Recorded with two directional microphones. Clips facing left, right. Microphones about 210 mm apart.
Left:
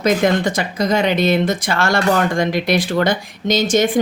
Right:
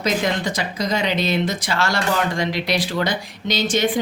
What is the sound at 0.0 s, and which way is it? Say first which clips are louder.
Speech: left 6 dB; 50° left (ahead or behind).